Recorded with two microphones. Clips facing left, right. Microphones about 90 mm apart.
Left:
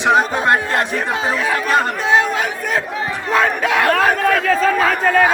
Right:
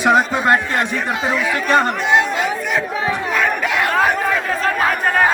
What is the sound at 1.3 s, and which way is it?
Speech, 35° left (ahead or behind).